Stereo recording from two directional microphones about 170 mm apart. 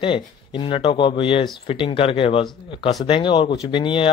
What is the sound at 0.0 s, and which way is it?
Speech, 30° left (ahead or behind).